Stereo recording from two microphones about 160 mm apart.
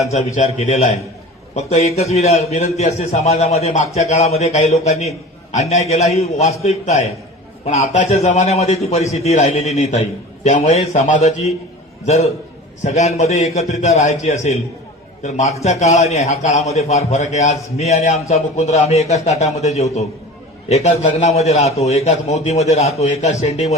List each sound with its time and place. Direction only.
0.3 s a man's voice: 45° left (ahead or behind)